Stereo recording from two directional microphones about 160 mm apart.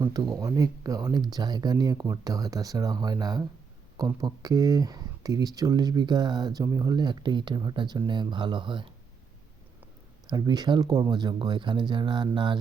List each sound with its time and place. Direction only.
0.0 s speech: 25° right (ahead or behind)
10.2 s speech: 25° right (ahead or behind)